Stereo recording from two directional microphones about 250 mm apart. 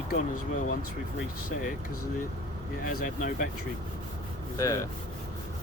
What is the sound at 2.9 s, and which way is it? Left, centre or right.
Speech, left.